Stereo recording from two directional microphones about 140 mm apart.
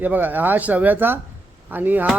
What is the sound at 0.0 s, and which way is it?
Speech, 10° right (ahead or behind).